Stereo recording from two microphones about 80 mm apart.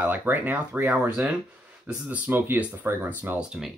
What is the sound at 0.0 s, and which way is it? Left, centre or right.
Speech, right.